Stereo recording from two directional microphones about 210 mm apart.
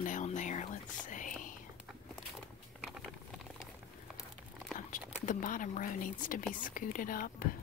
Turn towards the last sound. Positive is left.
turn(degrees=40)  # may be behind; listen again after turning